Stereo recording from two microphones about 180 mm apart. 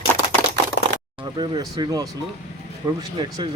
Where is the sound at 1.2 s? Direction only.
25° right (ahead or behind).